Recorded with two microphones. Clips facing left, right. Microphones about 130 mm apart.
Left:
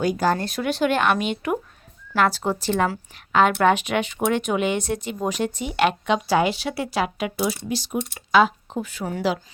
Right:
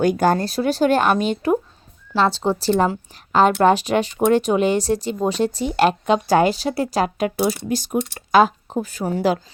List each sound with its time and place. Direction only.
0.0 s speech: 55° right (ahead or behind)
0.3 s a woman's voice: 35° right (ahead or behind)